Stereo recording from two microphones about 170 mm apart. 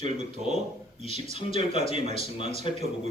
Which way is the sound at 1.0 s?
40° right (ahead or behind).